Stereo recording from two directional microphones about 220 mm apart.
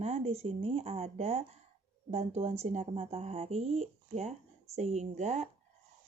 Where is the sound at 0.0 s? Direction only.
30° right (ahead or behind).